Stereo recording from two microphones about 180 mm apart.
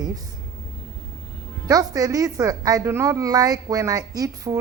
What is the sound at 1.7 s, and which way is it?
A woman's voice, 20° right (ahead or behind).